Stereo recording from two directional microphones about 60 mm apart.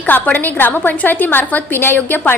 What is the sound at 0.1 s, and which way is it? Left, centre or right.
A woman's voice, left.